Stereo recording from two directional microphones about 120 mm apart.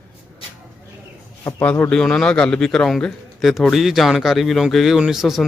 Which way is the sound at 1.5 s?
15° left (ahead or behind).